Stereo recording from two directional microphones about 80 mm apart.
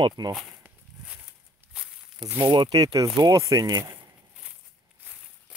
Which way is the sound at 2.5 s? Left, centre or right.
Right.